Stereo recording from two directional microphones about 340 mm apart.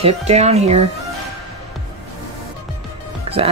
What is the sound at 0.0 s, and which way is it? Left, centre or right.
Speech, centre.